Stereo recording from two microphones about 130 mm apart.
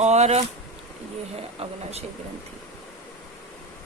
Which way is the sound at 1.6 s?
55° right (ahead or behind).